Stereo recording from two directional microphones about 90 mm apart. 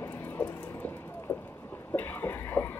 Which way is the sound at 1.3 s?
20° left (ahead or behind).